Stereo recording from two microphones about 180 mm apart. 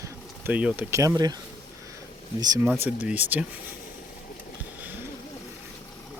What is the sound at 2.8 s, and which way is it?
Speech, 10° right (ahead or behind).